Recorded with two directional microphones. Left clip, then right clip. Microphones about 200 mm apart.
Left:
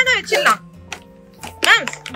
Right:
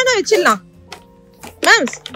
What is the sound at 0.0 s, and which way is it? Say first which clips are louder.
Music: right 1 dB; 25° right (ahead or behind).